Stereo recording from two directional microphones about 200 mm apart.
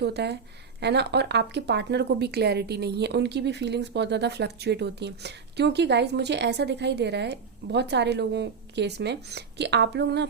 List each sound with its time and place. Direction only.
0.0 s speech: 55° right (ahead or behind)